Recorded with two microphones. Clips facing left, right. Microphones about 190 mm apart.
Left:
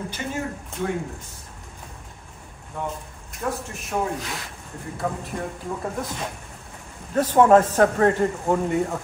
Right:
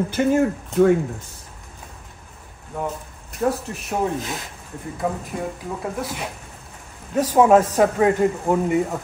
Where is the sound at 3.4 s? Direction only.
40° right (ahead or behind).